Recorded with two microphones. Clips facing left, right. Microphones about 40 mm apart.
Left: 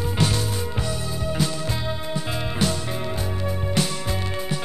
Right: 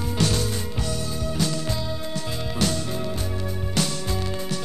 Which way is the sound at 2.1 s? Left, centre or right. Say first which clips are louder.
Left 2 dB; left.